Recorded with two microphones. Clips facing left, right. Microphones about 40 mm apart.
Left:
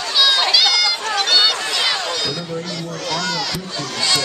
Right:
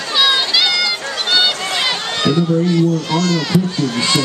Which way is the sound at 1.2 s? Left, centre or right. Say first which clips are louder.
Right 2 dB; right.